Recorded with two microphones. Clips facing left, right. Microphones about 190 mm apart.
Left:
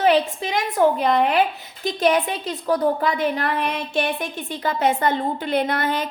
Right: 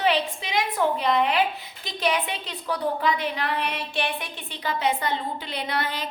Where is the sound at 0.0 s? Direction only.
45° left (ahead or behind).